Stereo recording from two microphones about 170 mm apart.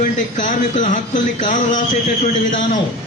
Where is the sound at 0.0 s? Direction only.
50° left (ahead or behind).